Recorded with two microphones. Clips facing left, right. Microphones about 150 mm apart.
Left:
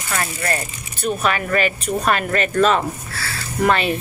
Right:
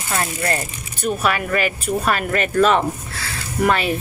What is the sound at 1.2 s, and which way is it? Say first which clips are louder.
Speech: left 1 dB; 5° right (ahead or behind).